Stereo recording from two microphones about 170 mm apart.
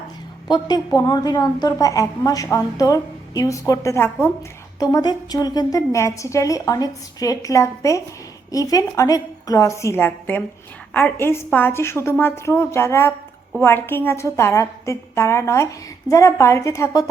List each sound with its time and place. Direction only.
0.4 s a woman's voice: 25° left (ahead or behind)